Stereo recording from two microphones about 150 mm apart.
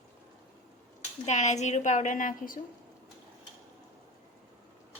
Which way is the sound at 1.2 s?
50° left (ahead or behind).